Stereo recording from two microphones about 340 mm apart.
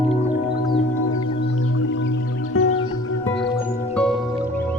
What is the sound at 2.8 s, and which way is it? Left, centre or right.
Music, centre.